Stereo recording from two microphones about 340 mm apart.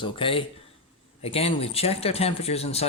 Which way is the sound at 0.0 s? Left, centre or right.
Centre.